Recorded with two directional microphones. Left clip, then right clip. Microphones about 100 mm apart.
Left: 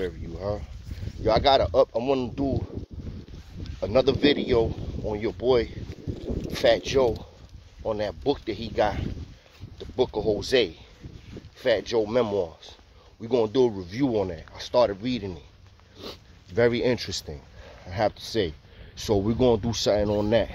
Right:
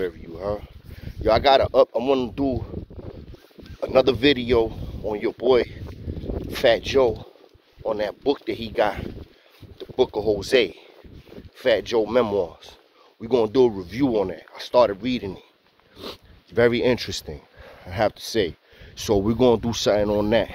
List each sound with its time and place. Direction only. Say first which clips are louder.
0.0 s speech: right 3 dB; 45° right (ahead or behind)
2.0 s speech: right 4 dB; 90° right
3.8 s speech: right 3 dB; 55° right (ahead or behind)
6.5 s speech: right 3 dB; 45° right (ahead or behind)
13.2 s speech: right 4 dB; 55° right (ahead or behind)
17.6 s speech: right 3 dB; 40° right (ahead or behind)